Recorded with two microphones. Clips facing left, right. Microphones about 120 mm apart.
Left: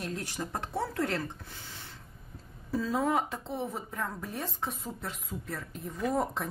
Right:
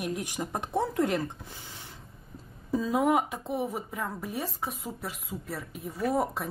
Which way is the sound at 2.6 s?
15° right (ahead or behind).